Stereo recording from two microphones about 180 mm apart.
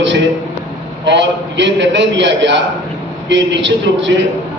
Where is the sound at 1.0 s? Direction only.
80° right.